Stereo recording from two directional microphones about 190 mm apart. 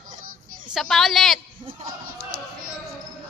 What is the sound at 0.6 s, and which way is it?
Speech, centre (ahead or behind).